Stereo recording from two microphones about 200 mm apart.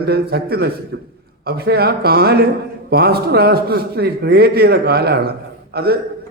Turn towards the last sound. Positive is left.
turn(degrees=-50)  # may be behind; listen again after turning